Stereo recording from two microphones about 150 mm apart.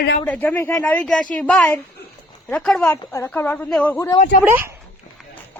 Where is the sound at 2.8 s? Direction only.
15° left (ahead or behind).